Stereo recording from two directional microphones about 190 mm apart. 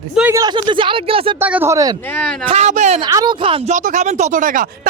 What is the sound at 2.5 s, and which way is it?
Speech, 35° right (ahead or behind).